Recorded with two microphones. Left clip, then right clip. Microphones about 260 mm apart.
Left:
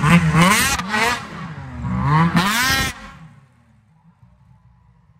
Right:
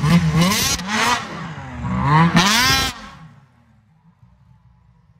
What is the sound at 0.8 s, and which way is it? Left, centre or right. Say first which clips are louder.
Vehicle: right 1 dB; right.